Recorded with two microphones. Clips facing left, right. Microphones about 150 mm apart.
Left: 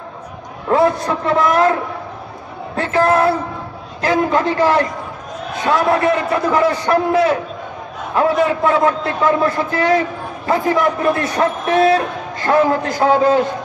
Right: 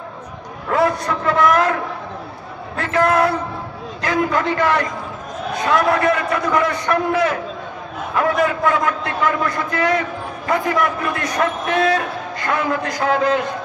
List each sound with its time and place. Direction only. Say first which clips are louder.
0.7 s a man's voice: left 3 dB; 25° left (ahead or behind)